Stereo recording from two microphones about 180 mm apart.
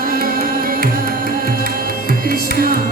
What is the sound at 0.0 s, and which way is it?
Music, 55° right (ahead or behind).